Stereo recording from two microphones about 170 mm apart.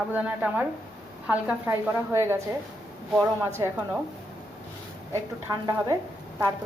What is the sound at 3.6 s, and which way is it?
Speech, 25° right (ahead or behind).